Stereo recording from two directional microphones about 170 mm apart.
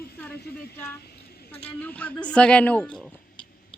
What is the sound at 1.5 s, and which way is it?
Speech, 10° left (ahead or behind).